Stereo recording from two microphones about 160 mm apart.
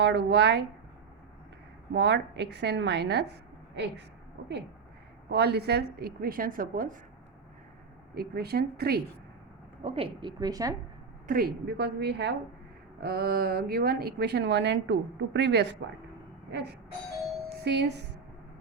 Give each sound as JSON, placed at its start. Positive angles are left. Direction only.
{"t": 0.0, "sound": "speech", "side_deg": -90}
{"t": 1.9, "sound": "speech", "side_deg": -90}
{"t": 5.3, "sound": "a woman's voice", "side_deg": -90}
{"t": 8.1, "sound": "a woman's voice", "side_deg": -80}
{"t": 9.8, "sound": "a woman's voice", "side_deg": -35}
{"t": 11.3, "sound": "speech", "side_deg": -80}
{"t": 13.0, "sound": "a woman's voice", "side_deg": -70}
{"t": 16.5, "sound": "a sound", "side_deg": -90}
{"t": 17.6, "sound": "speech", "side_deg": -90}